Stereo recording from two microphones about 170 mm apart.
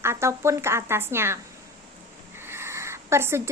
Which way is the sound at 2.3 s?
15° right (ahead or behind).